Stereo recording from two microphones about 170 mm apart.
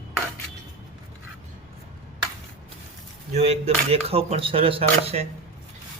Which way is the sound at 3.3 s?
40° right (ahead or behind).